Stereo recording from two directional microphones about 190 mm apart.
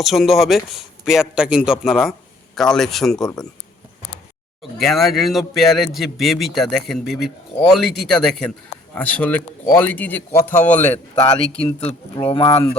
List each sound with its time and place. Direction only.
0.0 s a man's voice: centre (ahead or behind)
4.8 s a man's voice: centre (ahead or behind)
11.2 s speech: 30° left (ahead or behind)